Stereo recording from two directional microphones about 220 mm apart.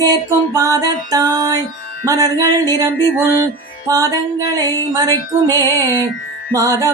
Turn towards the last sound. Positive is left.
turn(degrees=-15)  # may be behind; listen again after turning